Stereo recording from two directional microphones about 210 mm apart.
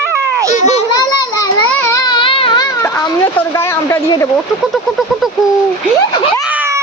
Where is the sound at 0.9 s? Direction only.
20° left (ahead or behind).